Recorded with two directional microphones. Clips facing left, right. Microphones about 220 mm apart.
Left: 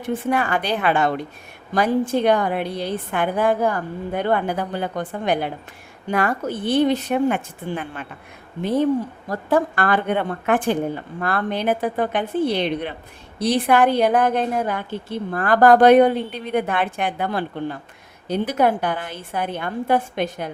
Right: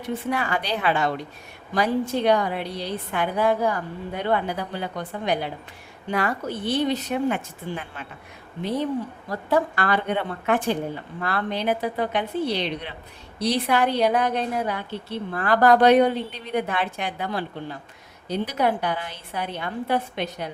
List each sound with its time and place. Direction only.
0.0 s a woman's voice: 50° left (ahead or behind)
9.3 s a woman's voice: 50° left (ahead or behind)